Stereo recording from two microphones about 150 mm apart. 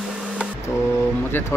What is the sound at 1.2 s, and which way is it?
Speech, 15° left (ahead or behind).